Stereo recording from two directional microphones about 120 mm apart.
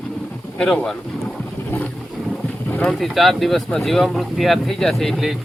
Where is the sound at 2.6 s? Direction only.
15° left (ahead or behind).